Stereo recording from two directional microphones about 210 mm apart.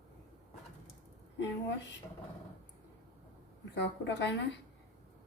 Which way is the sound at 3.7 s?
55° left (ahead or behind).